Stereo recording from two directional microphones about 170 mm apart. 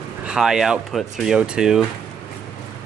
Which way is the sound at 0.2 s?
5° right (ahead or behind).